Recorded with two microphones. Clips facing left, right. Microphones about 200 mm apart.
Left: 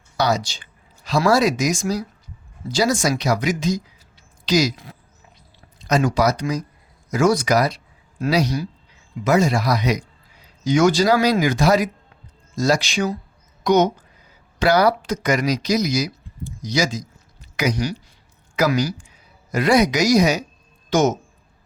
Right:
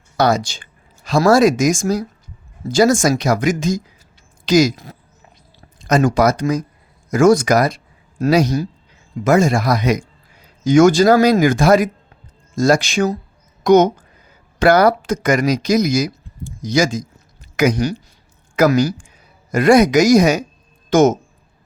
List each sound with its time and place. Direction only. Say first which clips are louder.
0.2 s speech: right 5 dB; 50° right (ahead or behind)